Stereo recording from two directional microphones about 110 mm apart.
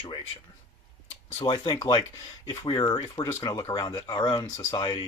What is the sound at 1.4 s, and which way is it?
Speech, 45° left (ahead or behind).